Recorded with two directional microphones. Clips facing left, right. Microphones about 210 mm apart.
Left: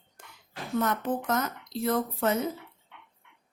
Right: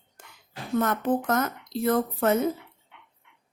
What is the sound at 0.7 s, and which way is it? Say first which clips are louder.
A woman's voice: right 4 dB; 50° right (ahead or behind).